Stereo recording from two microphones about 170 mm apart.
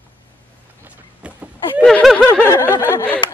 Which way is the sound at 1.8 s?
5° left (ahead or behind).